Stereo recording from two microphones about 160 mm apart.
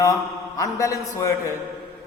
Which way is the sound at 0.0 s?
20° left (ahead or behind).